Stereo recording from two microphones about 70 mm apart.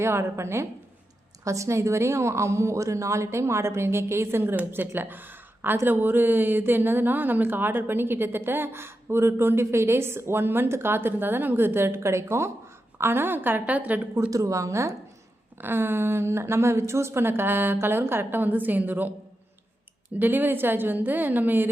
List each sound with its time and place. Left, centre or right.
0.0 s a woman's voice: right
14.3 s speech: right
15.5 s speech: right
20.1 s a woman's voice: right